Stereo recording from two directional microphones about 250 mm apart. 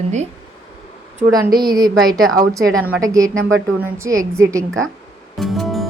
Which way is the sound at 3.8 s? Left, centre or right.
Centre.